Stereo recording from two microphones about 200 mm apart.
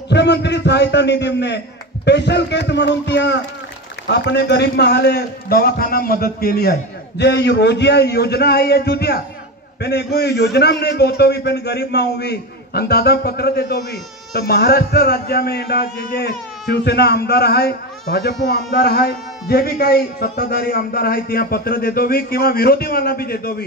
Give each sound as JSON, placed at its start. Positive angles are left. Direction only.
{"t": 0.1, "sound": "a man's voice", "side_deg": 60}